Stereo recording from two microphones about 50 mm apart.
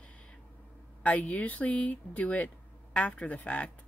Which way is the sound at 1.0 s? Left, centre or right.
Left.